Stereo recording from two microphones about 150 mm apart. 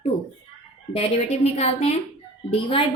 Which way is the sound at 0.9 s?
45° left (ahead or behind).